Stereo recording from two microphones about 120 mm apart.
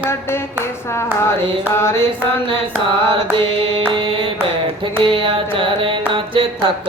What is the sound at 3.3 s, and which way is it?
Carnatic music, 45° right (ahead or behind).